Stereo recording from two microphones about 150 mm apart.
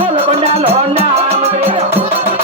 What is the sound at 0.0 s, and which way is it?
Music, 40° right (ahead or behind).